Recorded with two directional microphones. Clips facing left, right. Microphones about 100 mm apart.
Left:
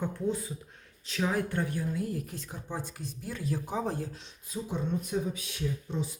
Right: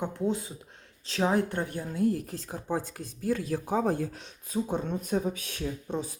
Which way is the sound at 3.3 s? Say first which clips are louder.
Even; 65° right (ahead or behind).